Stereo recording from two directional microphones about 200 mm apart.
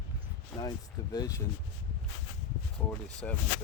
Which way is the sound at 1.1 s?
15° left (ahead or behind).